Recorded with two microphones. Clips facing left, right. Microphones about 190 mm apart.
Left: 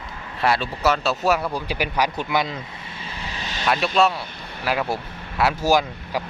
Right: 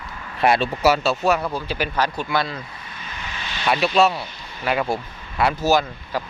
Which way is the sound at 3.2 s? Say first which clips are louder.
Left 1 dB; 35° left (ahead or behind).